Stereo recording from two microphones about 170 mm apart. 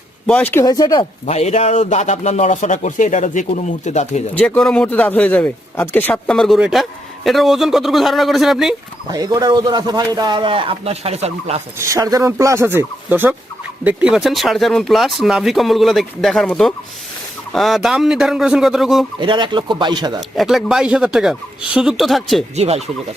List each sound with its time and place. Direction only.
0.3 s a man's voice: 10° left (ahead or behind)
0.6 s speech: 20° left (ahead or behind)
1.2 s a man's voice: 40° left (ahead or behind)
4.4 s a man's voice: 5° left (ahead or behind)
9.0 s a man's voice: 20° right (ahead or behind); by 11.6 s 40° right (ahead or behind)
11.8 s speech: 20° right (ahead or behind); by 19.0 s centre (ahead or behind)
19.2 s a man's voice: 25° right (ahead or behind)
20.3 s speech: centre (ahead or behind)
22.5 s speech: 40° right (ahead or behind)